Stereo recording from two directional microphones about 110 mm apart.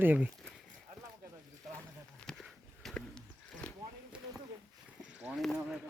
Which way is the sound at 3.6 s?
10° left (ahead or behind).